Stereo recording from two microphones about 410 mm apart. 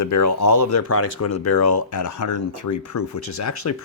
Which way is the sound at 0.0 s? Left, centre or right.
Left.